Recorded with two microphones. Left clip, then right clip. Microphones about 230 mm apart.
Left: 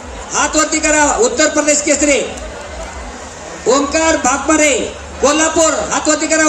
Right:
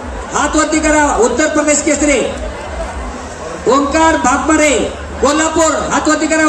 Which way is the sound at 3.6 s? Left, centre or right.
Centre.